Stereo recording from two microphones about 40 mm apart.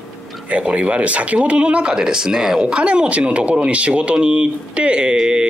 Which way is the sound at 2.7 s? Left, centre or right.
Right.